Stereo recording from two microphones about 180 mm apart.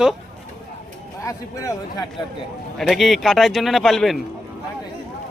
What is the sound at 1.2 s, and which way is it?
Speech, 20° left (ahead or behind).